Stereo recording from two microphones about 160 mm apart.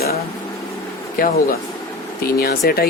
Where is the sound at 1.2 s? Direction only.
60° left (ahead or behind).